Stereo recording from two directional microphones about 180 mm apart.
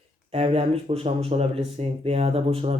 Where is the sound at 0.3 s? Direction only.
35° right (ahead or behind).